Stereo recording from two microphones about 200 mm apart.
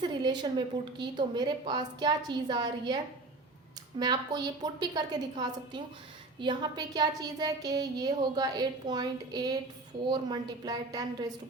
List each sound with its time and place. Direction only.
0.0 s speech: 20° right (ahead or behind)